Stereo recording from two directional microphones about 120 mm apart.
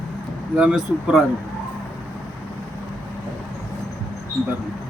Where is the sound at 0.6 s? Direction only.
5° right (ahead or behind).